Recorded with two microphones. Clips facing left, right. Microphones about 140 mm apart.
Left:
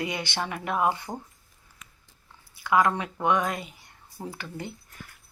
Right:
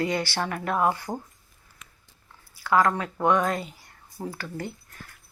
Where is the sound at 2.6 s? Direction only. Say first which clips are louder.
Right 1 dB; 15° left (ahead or behind).